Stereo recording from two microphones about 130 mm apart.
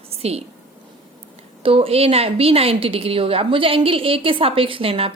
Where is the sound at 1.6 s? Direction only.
45° right (ahead or behind).